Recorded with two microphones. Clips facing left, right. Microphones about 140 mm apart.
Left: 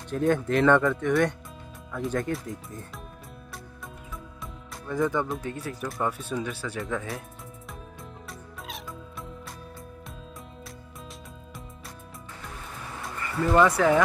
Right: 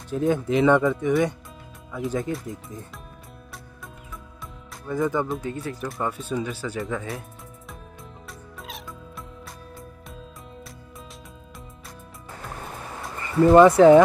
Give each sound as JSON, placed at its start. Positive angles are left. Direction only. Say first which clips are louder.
{"t": 0.1, "sound": "speech", "louder": "right 2 dB", "side_deg": -5}
{"t": 4.8, "sound": "speech", "louder": "right 2 dB", "side_deg": -5}
{"t": 8.3, "sound": "music", "louder": "right 2 dB", "side_deg": 0}
{"t": 13.2, "sound": "speech", "louder": "right 8 dB", "side_deg": -25}